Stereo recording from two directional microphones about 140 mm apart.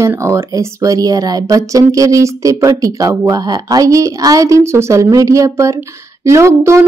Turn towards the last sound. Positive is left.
turn(degrees=-20)  # may be behind; listen again after turning